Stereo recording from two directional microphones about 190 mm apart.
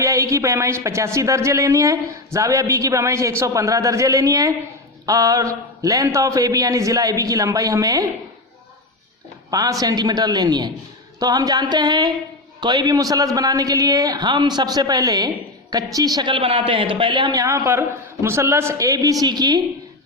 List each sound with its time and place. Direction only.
0.0 s speech: 15° right (ahead or behind)
9.5 s a man's voice: 20° right (ahead or behind)